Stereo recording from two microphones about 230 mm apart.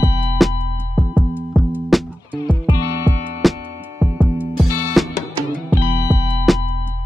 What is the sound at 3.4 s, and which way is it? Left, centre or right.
Music, centre.